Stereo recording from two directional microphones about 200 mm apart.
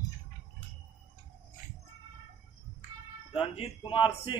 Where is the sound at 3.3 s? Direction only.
30° left (ahead or behind).